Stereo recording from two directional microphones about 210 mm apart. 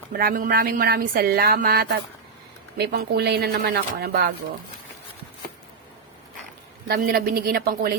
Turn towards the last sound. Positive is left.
turn(degrees=-45)  # may be behind; listen again after turning